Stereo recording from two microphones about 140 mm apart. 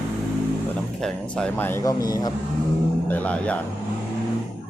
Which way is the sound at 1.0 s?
5° left (ahead or behind).